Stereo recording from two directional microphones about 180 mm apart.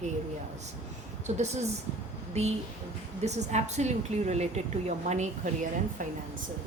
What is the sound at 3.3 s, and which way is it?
A woman's voice, 40° right (ahead or behind).